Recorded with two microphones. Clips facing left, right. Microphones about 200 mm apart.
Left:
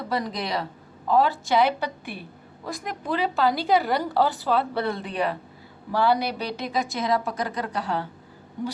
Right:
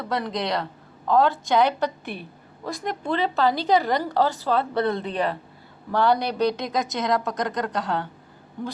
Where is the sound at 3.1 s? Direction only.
5° left (ahead or behind).